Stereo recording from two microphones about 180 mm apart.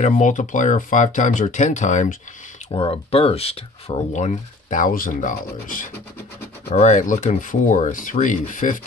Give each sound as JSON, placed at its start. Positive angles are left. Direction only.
{"t": 0.0, "sound": "speech", "side_deg": 45}
{"t": 2.7, "sound": "speech", "side_deg": 30}